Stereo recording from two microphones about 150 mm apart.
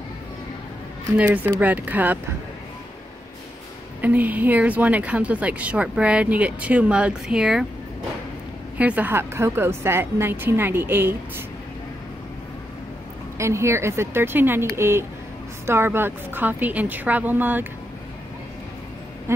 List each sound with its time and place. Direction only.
1.1 s speech: 10° right (ahead or behind)
4.0 s speech: 10° right (ahead or behind)
8.7 s speech: 10° right (ahead or behind)
13.4 s speech: 20° right (ahead or behind)